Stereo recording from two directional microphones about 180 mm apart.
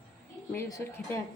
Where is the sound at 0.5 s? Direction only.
15° left (ahead or behind).